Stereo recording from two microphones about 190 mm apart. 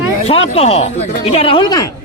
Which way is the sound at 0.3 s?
35° left (ahead or behind).